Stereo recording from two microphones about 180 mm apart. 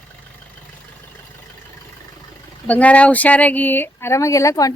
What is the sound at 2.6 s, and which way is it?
Speech, 10° left (ahead or behind).